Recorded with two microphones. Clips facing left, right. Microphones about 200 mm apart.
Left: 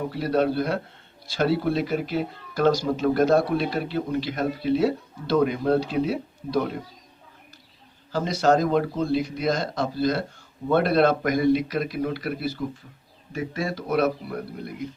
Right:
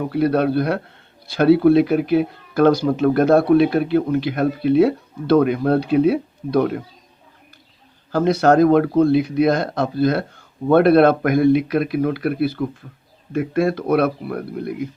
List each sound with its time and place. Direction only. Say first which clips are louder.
0.1 s speech: right 6 dB; 60° right (ahead or behind)
8.1 s speech: right 6 dB; 60° right (ahead or behind)